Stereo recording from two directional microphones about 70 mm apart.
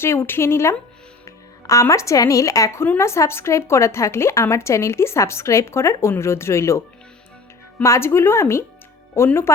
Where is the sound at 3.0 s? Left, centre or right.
Left.